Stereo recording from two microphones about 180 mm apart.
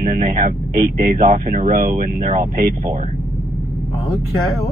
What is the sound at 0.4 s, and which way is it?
Speech, 50° right (ahead or behind).